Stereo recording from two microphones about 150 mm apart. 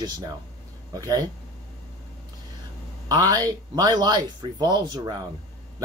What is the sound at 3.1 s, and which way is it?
Speech, 25° right (ahead or behind).